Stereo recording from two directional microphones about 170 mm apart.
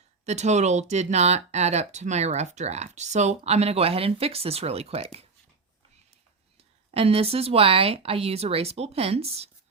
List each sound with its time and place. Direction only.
0.3 s speech: 40° right (ahead or behind)
6.9 s speech: 35° right (ahead or behind)